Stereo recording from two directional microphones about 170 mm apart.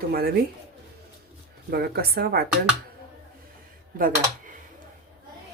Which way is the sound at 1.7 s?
65° right (ahead or behind).